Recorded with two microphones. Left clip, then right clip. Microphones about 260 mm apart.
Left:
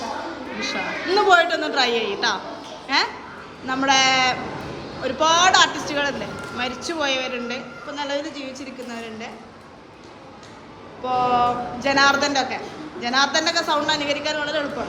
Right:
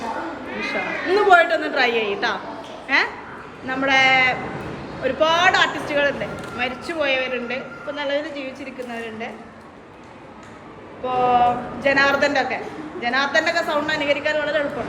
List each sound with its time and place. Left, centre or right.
0.6 s a woman's voice: centre
11.0 s a woman's voice: centre